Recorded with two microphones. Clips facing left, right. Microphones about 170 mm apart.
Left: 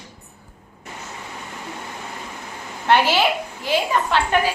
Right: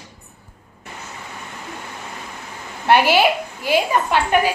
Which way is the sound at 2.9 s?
10° right (ahead or behind).